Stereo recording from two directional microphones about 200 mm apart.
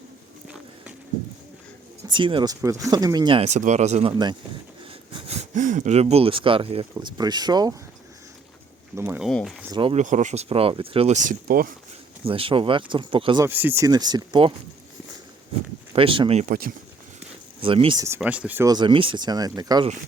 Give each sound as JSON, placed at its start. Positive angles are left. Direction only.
{"t": 2.0, "sound": "speech", "side_deg": -25}
{"t": 4.1, "sound": "speech", "side_deg": -20}
{"t": 5.4, "sound": "speech", "side_deg": -40}
{"t": 9.0, "sound": "speech", "side_deg": -15}
{"t": 9.2, "sound": "speech", "side_deg": 0}
{"t": 9.7, "sound": "speech", "side_deg": -25}
{"t": 10.0, "sound": "speech", "side_deg": -40}
{"t": 12.2, "sound": "speech", "side_deg": -25}
{"t": 13.4, "sound": "speech", "side_deg": -10}
{"t": 15.9, "sound": "speech", "side_deg": -25}
{"t": 17.6, "sound": "speech", "side_deg": -25}
{"t": 18.0, "sound": "speech", "side_deg": -10}